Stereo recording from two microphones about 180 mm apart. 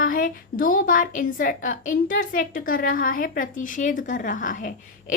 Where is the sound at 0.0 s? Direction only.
50° left (ahead or behind).